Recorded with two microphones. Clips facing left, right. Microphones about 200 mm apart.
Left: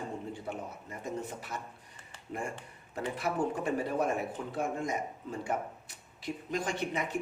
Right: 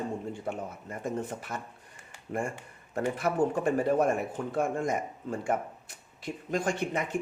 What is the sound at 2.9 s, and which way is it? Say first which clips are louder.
A man's voice: right 5 dB; 50° right (ahead or behind).